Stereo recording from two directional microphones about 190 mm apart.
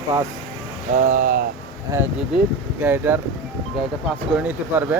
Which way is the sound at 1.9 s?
10° right (ahead or behind).